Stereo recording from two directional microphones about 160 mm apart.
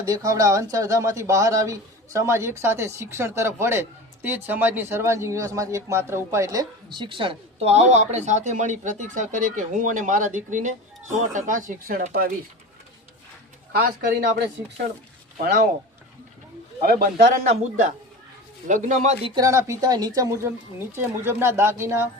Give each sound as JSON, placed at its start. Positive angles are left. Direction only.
{"t": 0.0, "sound": "a man's voice", "side_deg": -20}
{"t": 13.7, "sound": "speech", "side_deg": -75}
{"t": 16.8, "sound": "speech", "side_deg": -70}
{"t": 18.7, "sound": "a woman's voice", "side_deg": -50}
{"t": 19.4, "sound": "a man's voice", "side_deg": -20}